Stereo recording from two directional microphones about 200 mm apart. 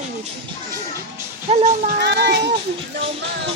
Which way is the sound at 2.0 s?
55° right (ahead or behind).